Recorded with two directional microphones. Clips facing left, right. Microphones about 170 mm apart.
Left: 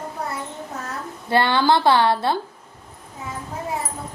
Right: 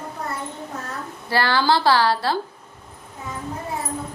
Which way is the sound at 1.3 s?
20° left (ahead or behind).